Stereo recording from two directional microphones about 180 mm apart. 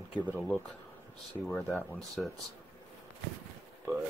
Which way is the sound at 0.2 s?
10° left (ahead or behind).